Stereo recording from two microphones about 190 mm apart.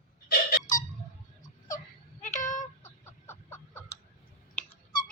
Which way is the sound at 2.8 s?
15° left (ahead or behind).